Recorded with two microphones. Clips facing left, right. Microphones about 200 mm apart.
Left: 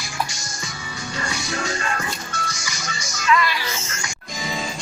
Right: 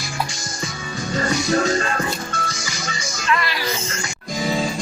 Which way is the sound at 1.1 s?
45° right (ahead or behind).